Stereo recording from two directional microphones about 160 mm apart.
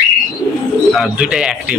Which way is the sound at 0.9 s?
Centre (ahead or behind).